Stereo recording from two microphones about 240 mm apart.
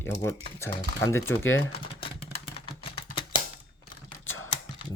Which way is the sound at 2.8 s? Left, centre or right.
Left.